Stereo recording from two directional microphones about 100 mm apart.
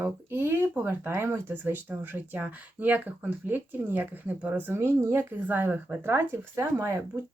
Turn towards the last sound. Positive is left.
turn(degrees=-25)  # may be behind; listen again after turning